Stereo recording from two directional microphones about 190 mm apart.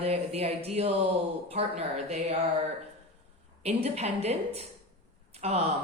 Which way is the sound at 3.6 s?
35° right (ahead or behind).